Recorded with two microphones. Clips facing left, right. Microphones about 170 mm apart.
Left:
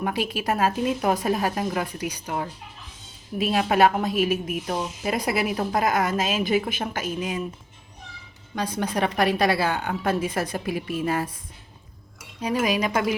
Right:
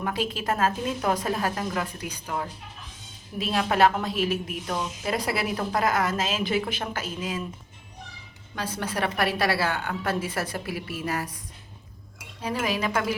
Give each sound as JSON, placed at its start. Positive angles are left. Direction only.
{"t": 0.0, "sound": "speech", "side_deg": 15}
{"t": 3.3, "sound": "speech", "side_deg": 15}
{"t": 8.5, "sound": "a woman's voice", "side_deg": 15}
{"t": 12.4, "sound": "speech", "side_deg": 15}